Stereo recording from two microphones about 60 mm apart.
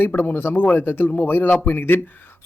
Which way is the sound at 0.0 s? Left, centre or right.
Left.